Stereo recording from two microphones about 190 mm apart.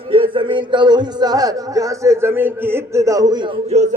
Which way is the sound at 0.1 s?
25° right (ahead or behind).